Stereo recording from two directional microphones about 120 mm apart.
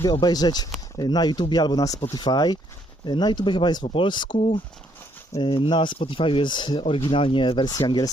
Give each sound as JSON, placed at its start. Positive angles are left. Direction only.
{"t": 0.0, "sound": "speech", "side_deg": 35}
{"t": 5.4, "sound": "speech", "side_deg": 45}